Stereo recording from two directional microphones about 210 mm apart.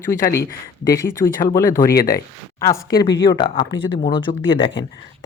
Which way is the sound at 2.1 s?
15° left (ahead or behind).